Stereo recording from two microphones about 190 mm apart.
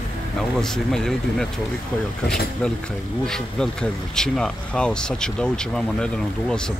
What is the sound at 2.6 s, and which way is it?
Speech, 5° left (ahead or behind).